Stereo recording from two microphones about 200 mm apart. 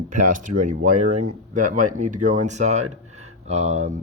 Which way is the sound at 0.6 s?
40° right (ahead or behind).